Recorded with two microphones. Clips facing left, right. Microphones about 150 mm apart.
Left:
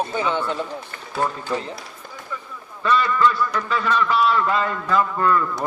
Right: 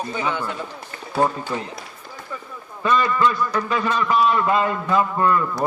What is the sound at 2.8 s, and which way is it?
A man's voice, 20° right (ahead or behind).